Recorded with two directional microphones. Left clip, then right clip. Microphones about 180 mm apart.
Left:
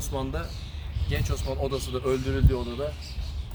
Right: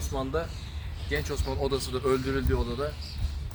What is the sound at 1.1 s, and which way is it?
Speech, 50° left (ahead or behind).